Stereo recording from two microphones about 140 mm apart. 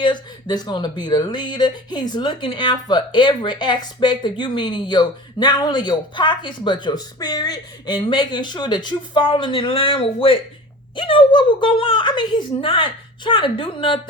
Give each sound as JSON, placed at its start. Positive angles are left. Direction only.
{"t": 0.0, "sound": "speech", "side_deg": 30}